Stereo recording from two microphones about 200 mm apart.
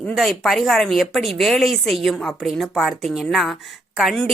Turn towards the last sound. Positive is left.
turn(degrees=0)  # may be behind; listen again after turning